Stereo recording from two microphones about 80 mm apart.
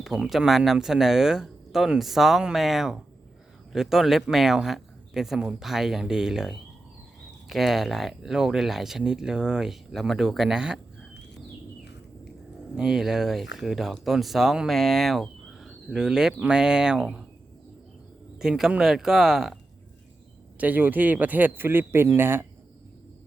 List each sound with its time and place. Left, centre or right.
0.0 s speech: centre
12.7 s speech: centre
18.3 s speech: centre
20.6 s a man's voice: right